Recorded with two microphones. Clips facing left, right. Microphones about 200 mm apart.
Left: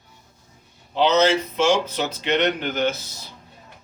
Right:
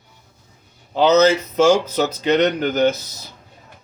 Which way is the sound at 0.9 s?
40° right (ahead or behind).